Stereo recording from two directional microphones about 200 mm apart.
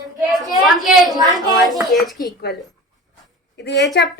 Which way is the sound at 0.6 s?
Centre (ahead or behind).